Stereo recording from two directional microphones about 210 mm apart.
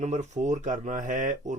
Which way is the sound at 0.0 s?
35° right (ahead or behind).